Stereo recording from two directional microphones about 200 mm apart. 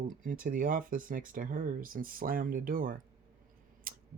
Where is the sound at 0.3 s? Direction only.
40° right (ahead or behind).